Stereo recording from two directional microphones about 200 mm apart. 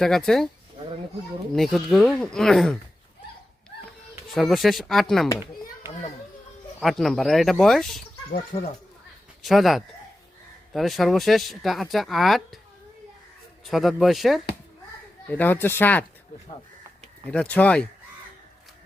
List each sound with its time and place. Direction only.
0.0 s speech: centre (ahead or behind)
1.5 s speech: centre (ahead or behind)
4.4 s speech: centre (ahead or behind)
6.7 s speech: centre (ahead or behind)
8.5 s speech: 30° left (ahead or behind)
9.4 s speech: centre (ahead or behind)
13.7 s speech: centre (ahead or behind)
15.3 s speech: 10° left (ahead or behind)
17.3 s speech: 5° left (ahead or behind)